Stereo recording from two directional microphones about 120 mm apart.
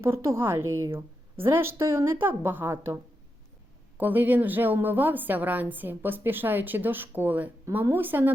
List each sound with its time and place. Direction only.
0.0 s a woman's voice: 25° right (ahead or behind)